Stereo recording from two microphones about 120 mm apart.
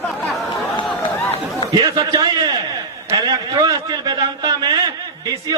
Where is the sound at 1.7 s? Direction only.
35° right (ahead or behind).